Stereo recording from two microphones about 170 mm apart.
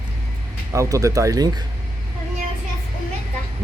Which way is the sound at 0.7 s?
20° right (ahead or behind).